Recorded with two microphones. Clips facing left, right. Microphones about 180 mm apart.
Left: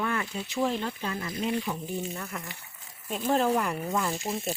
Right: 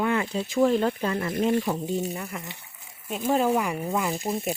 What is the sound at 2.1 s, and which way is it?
Speech, 10° right (ahead or behind).